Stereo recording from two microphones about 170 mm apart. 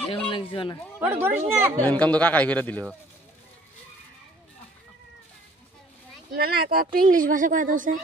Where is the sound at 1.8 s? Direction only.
10° left (ahead or behind).